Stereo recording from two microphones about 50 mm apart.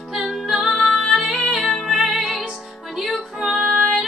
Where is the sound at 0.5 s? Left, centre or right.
Centre.